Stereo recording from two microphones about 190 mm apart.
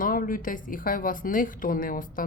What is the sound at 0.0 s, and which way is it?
A woman's voice, 45° left (ahead or behind).